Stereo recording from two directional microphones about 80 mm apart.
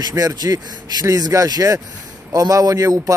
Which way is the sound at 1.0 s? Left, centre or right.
Right.